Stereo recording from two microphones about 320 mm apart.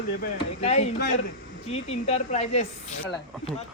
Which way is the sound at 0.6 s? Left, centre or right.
Centre.